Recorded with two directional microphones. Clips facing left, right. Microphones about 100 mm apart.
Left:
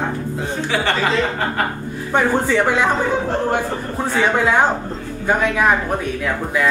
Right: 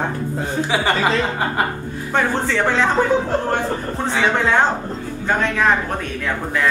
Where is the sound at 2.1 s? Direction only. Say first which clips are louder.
Left 3 dB; 10° left (ahead or behind).